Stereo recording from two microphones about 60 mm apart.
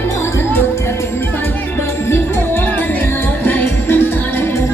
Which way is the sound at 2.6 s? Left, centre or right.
Left.